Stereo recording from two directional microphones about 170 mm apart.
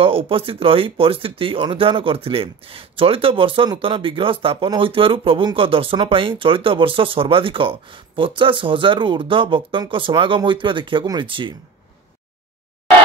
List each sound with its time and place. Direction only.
0.0 s speech: 35° right (ahead or behind)